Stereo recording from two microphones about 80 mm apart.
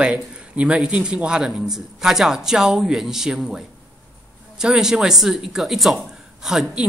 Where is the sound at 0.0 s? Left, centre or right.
Centre.